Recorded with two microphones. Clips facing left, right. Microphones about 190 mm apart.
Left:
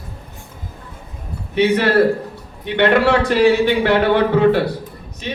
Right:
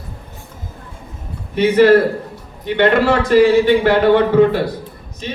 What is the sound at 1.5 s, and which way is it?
A man's voice, 65° left (ahead or behind).